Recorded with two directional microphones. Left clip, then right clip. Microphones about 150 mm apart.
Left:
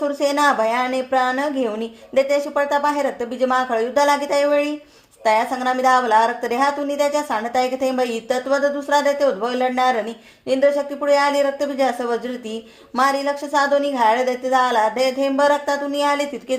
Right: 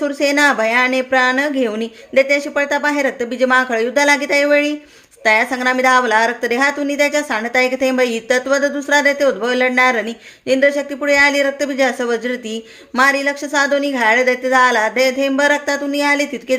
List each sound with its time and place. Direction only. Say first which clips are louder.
0.0 s a woman's voice: right 3 dB; 20° right (ahead or behind)